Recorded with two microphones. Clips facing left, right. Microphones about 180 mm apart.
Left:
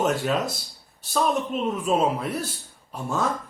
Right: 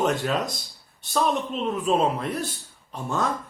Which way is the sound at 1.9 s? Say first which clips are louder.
Even; 5° left (ahead or behind).